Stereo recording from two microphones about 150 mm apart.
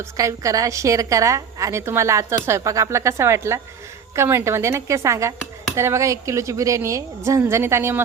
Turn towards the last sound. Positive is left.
turn(degrees=-15)  # may be behind; listen again after turning